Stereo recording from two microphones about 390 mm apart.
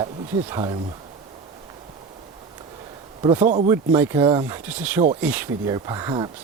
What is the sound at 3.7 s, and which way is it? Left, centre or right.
Speech, centre.